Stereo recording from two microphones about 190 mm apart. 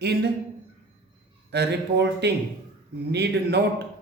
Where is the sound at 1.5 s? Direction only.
60° right (ahead or behind).